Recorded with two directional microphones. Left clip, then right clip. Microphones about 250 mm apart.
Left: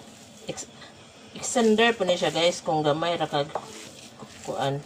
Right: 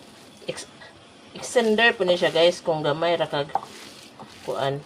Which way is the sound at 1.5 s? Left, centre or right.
Right.